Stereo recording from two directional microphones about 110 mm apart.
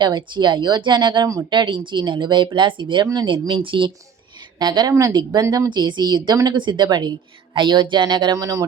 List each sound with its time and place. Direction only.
0.0 s speech: 45° right (ahead or behind)
4.6 s speech: 40° right (ahead or behind)
5.7 s speech: 45° right (ahead or behind)